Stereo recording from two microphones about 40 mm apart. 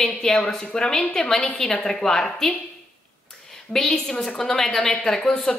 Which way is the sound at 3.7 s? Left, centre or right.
Left.